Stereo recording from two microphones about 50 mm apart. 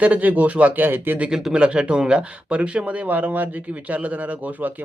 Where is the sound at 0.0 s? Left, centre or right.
Right.